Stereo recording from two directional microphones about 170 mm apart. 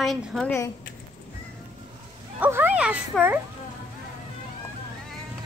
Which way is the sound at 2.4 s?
10° right (ahead or behind).